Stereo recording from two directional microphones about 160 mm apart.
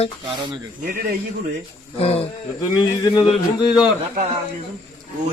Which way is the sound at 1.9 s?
40° left (ahead or behind).